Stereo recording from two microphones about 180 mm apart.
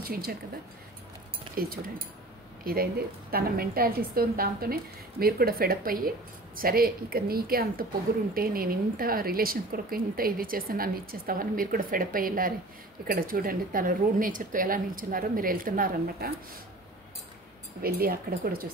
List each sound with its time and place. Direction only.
0.0 s a woman's voice: 60° right (ahead or behind)
1.5 s a woman's voice: 55° right (ahead or behind)
17.8 s a woman's voice: 55° right (ahead or behind)